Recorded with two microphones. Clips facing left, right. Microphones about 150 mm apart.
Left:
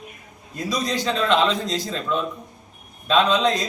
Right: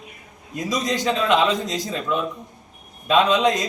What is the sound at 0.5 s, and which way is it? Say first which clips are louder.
A man's voice: right 1 dB; 15° right (ahead or behind).